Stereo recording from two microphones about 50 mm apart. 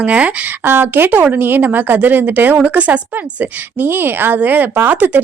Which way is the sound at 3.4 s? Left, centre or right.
Right.